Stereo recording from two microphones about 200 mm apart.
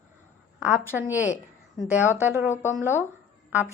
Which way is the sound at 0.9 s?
10° right (ahead or behind).